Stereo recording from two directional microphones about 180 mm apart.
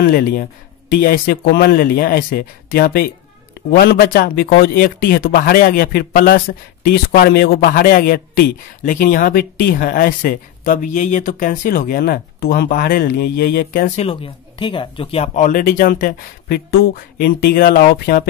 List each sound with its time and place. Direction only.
0.0 s a man's voice: 55° left (ahead or behind)
13.9 s a man's voice: 30° left (ahead or behind); by 18.2 s 55° left (ahead or behind)